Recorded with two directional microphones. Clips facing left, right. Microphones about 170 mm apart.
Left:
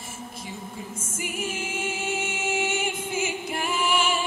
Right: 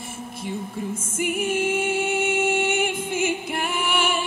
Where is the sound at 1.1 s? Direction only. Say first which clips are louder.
Right 8 dB; 55° right (ahead or behind).